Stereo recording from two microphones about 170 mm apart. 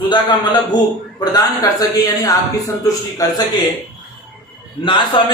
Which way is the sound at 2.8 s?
20° left (ahead or behind).